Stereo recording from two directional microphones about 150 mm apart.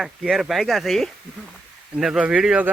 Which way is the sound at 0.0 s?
Centre (ahead or behind).